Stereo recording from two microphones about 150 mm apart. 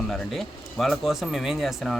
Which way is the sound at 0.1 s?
Centre (ahead or behind).